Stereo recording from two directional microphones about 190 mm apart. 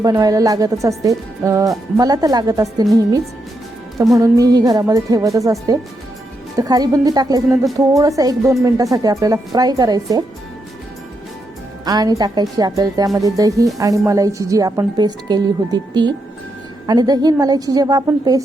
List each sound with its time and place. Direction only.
0.0 s speech: 20° right (ahead or behind)
3.9 s a woman's voice: 20° right (ahead or behind)
11.9 s a woman's voice: 20° right (ahead or behind)